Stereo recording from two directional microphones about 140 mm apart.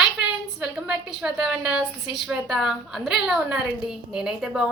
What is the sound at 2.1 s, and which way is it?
A woman's voice, centre (ahead or behind).